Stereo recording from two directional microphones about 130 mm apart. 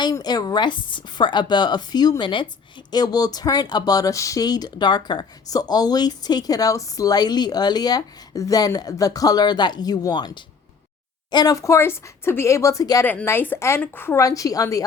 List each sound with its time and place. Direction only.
0.0 s speech: 30° left (ahead or behind)
13.1 s speech: 15° left (ahead or behind)